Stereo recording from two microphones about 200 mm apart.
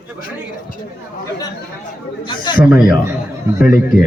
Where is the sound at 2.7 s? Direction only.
Centre (ahead or behind).